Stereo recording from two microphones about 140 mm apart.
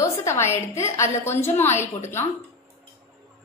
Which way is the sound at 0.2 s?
20° left (ahead or behind).